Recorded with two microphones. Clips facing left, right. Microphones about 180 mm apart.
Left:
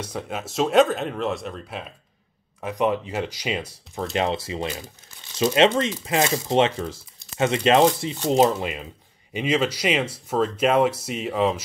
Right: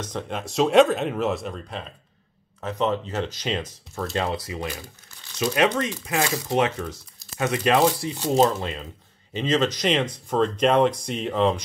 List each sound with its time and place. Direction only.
0.0 s speech: 5° left (ahead or behind)
4.0 s speech: 25° left (ahead or behind); by 11.6 s 5° left (ahead or behind)